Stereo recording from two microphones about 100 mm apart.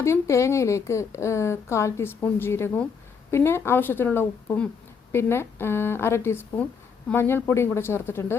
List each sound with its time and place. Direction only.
0.0 s a woman's voice: 30° left (ahead or behind)